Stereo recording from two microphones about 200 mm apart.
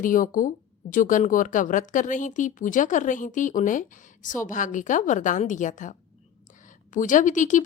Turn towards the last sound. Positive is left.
turn(degrees=40)  # may be behind; listen again after turning